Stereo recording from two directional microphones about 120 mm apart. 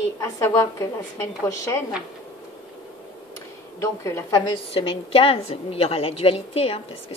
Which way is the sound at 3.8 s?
25° left (ahead or behind).